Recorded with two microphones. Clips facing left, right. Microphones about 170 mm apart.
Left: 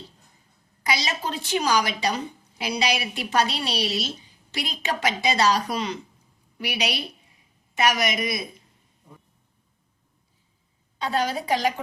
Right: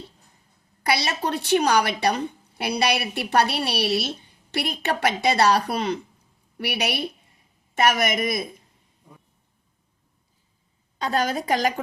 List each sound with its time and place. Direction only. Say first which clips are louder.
0.9 s a woman's voice: right 3 dB; 65° right (ahead or behind)
10.9 s a woman's voice: right 1 dB; 45° right (ahead or behind)